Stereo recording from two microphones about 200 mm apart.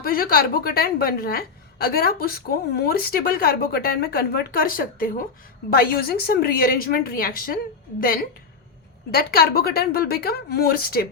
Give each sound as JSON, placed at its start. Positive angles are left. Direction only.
{"t": 0.0, "sound": "a woman's voice", "side_deg": 45}
{"t": 9.1, "sound": "a woman's voice", "side_deg": 50}